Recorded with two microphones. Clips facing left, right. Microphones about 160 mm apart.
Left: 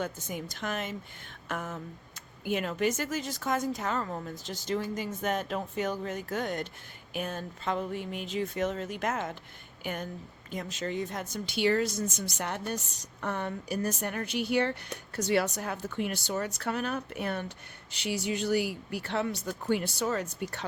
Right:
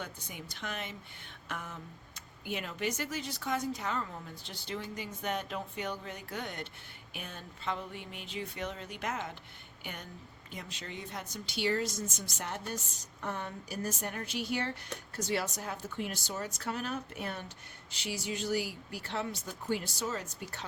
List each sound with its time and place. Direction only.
0.0 s a woman's voice: 45° left (ahead or behind); by 20.7 s 65° left (ahead or behind)